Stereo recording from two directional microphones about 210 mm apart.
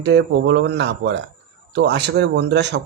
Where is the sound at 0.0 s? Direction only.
50° right (ahead or behind).